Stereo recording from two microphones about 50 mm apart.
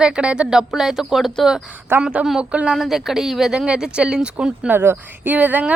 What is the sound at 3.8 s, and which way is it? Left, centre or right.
Speech, centre.